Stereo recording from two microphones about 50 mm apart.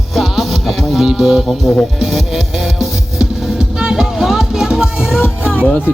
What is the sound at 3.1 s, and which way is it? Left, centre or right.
Music, centre.